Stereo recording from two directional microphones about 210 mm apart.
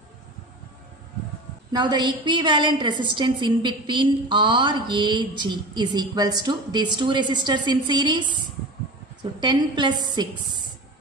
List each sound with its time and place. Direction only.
1.7 s a woman's voice: 20° right (ahead or behind)